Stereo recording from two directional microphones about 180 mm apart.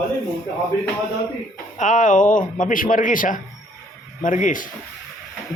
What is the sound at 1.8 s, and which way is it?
Speech, 45° left (ahead or behind).